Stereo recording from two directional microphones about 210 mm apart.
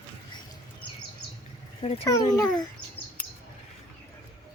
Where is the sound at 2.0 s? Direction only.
15° left (ahead or behind).